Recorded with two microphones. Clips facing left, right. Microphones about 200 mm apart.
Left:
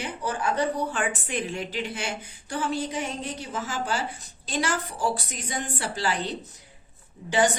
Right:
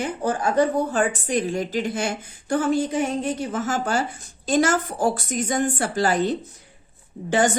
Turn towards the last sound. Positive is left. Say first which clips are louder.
# right 3 dB
turn(degrees=-50)  # may be behind; listen again after turning